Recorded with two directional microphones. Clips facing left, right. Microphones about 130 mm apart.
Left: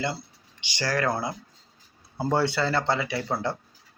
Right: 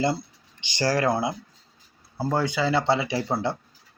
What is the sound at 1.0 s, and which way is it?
Speech, 20° right (ahead or behind).